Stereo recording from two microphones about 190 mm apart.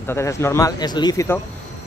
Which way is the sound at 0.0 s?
15° left (ahead or behind).